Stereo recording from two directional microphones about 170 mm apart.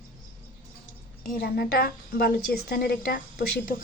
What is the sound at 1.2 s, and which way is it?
A woman's voice, 60° left (ahead or behind).